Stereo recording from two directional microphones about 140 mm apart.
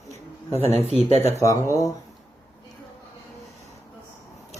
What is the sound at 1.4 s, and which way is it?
Speech, 20° left (ahead or behind).